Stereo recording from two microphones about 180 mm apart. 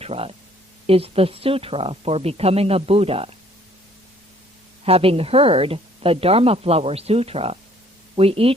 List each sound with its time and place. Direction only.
0.0 s a woman's voice: 35° right (ahead or behind)
4.9 s a woman's voice: 35° right (ahead or behind)